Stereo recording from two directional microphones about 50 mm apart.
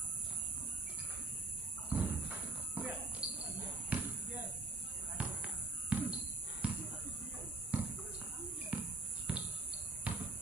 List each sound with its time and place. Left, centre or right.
1.9 s a sound: right
3.2 s cricket: right
3.9 s basketball bounce: right
5.1 s basketball bounce: right
8.7 s basketball bounce: right